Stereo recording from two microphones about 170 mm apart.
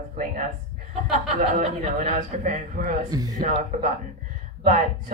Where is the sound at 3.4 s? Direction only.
45° right (ahead or behind).